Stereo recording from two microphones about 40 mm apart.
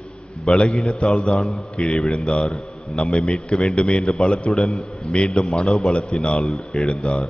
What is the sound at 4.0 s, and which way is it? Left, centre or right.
A man's voice, centre.